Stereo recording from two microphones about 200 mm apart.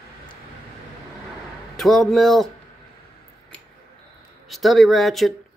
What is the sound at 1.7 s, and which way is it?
Speech, centre (ahead or behind).